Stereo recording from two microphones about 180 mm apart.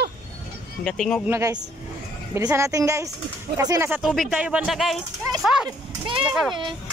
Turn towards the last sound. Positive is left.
turn(degrees=0)  # may be behind; listen again after turning